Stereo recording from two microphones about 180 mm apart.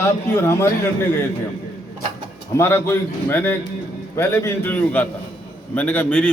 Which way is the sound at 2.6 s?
15° left (ahead or behind).